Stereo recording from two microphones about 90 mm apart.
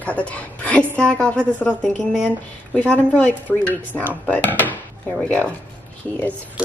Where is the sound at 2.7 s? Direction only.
15° left (ahead or behind).